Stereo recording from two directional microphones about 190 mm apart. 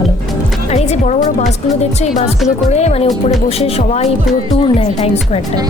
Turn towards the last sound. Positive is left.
turn(degrees=30)  # may be behind; listen again after turning